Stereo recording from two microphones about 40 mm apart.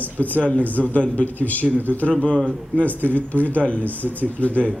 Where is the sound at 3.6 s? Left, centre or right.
Left.